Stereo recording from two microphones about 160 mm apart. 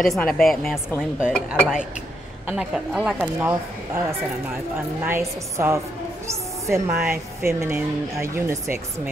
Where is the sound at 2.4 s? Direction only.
5° right (ahead or behind).